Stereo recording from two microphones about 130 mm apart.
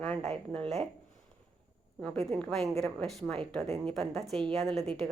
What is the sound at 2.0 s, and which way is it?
Speech, 5° left (ahead or behind).